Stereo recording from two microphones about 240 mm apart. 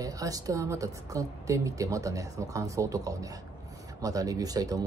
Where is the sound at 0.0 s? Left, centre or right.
Centre.